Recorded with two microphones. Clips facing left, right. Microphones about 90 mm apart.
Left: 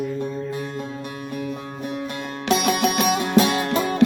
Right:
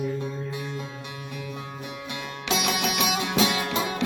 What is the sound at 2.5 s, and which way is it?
Music, 50° left (ahead or behind).